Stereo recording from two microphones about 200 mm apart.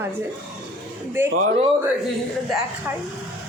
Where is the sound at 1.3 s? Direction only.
35° right (ahead or behind).